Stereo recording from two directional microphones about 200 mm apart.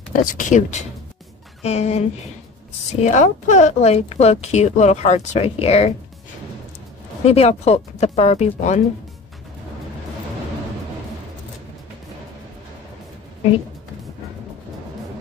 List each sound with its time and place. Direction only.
0.1 s speech: 40° left (ahead or behind)
7.2 s speech: 30° left (ahead or behind)